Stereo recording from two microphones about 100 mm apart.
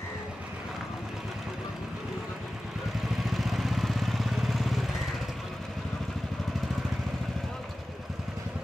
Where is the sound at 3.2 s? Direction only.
Centre (ahead or behind).